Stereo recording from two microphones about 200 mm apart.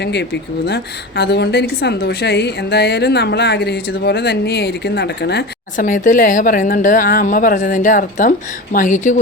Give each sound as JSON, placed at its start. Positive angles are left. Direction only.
{"t": 0.0, "sound": "a woman's voice", "side_deg": 55}
{"t": 5.7, "sound": "speech", "side_deg": 40}